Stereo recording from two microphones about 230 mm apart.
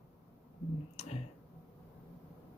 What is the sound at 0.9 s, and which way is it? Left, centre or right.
Speech, left.